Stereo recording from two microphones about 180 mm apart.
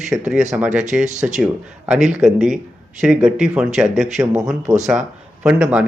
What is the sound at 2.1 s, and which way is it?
Speech, centre (ahead or behind).